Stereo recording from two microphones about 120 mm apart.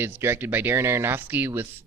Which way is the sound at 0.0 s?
20° right (ahead or behind).